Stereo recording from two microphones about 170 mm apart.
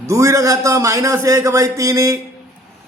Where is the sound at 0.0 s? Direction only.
20° right (ahead or behind).